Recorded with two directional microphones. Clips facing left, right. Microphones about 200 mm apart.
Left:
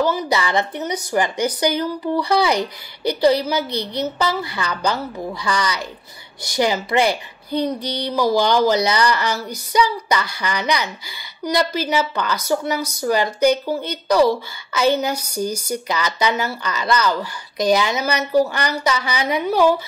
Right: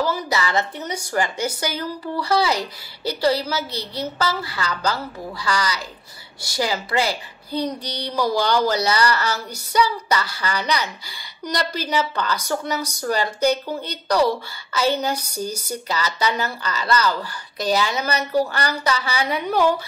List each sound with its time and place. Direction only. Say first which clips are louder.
0.0 s a woman's voice: left 3 dB; 20° left (ahead or behind)
7.5 s child singing: left 4 dB; 10° right (ahead or behind)
8.2 s speech: left 3 dB; 15° left (ahead or behind)